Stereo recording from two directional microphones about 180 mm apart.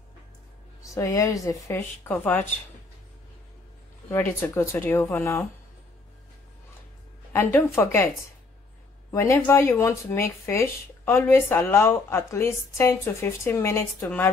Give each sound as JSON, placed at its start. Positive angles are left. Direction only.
{"t": 0.8, "sound": "speech", "side_deg": 15}
{"t": 4.1, "sound": "speech", "side_deg": 15}
{"t": 7.3, "sound": "speech", "side_deg": 15}
{"t": 9.1, "sound": "speech", "side_deg": 15}